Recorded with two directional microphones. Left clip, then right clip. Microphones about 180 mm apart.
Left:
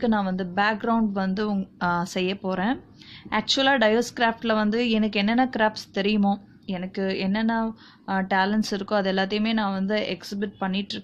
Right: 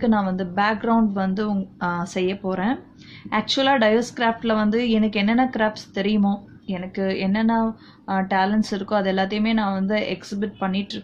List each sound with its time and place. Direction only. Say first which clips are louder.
0.0 s a woman's voice: right 3 dB; 35° left (ahead or behind)